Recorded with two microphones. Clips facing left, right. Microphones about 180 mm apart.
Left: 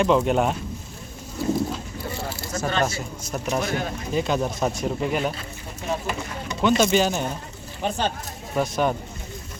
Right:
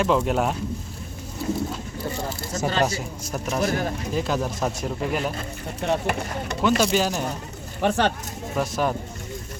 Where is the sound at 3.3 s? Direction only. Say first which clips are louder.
Left 1 dB; 5° right (ahead or behind).